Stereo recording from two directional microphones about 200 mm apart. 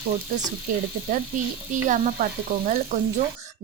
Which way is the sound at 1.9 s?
40° right (ahead or behind).